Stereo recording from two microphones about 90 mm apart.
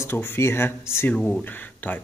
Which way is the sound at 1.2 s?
5° left (ahead or behind).